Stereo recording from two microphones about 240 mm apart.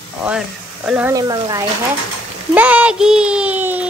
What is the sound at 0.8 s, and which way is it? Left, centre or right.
Speech, centre.